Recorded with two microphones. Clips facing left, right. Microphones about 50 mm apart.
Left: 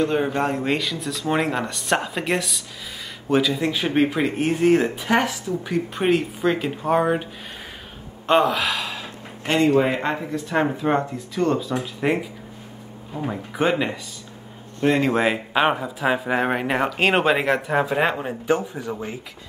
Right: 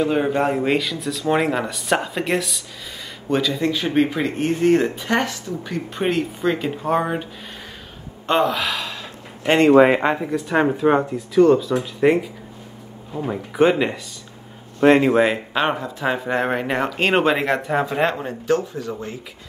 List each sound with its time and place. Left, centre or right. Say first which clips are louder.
0.0 s speech: right 2 dB; centre
8.3 s speech: left 1 dB; centre
10.2 s speech: right 3 dB; centre
15.0 s speech: right 4 dB; centre